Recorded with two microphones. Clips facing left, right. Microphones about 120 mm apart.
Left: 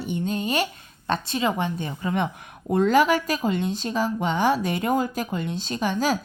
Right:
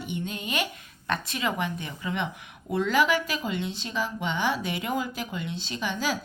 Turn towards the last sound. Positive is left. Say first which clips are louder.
# left 6 dB
turn(degrees=45)  # may be behind; listen again after turning